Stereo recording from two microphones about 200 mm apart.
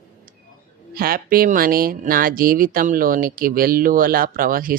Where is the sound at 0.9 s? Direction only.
45° right (ahead or behind).